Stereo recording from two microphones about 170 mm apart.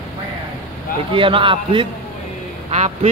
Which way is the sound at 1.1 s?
30° right (ahead or behind).